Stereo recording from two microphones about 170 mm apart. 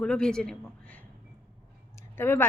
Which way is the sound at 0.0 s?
5° left (ahead or behind).